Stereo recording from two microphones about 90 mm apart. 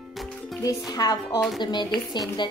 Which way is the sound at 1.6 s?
55° left (ahead or behind).